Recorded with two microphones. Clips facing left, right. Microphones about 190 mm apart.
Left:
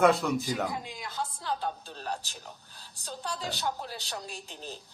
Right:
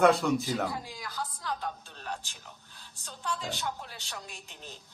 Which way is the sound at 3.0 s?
35° left (ahead or behind).